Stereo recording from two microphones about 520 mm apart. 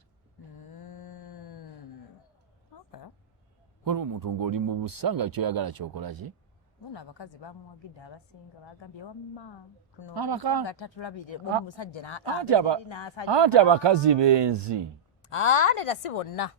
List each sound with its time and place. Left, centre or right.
0.6 s a sound: left
3.8 s speech: right
6.9 s speech: left
10.2 s speech: right
10.7 s speech: left
12.2 s speech: right
12.8 s speech: left
13.2 s speech: right
15.2 s speech: left